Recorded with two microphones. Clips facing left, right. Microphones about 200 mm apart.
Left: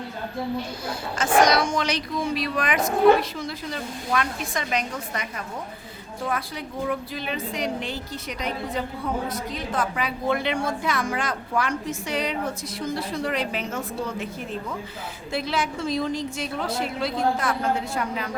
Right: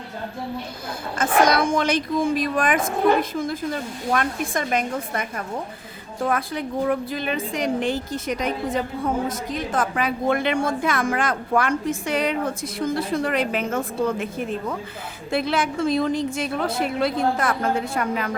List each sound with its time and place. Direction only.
1.2 s a woman's voice: 55° right (ahead or behind)
6.2 s a woman's voice: 55° right (ahead or behind)
15.3 s a woman's voice: 55° right (ahead or behind)